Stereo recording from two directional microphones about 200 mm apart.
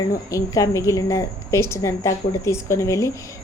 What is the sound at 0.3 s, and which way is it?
A woman's voice, 15° left (ahead or behind).